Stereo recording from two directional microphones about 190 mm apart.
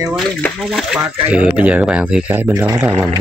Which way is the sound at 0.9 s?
5° right (ahead or behind).